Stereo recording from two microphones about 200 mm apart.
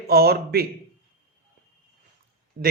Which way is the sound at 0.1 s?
50° right (ahead or behind).